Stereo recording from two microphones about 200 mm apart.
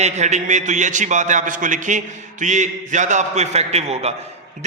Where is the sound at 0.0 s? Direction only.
35° right (ahead or behind).